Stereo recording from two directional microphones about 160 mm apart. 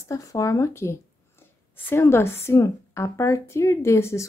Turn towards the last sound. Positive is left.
turn(degrees=15)  # may be behind; listen again after turning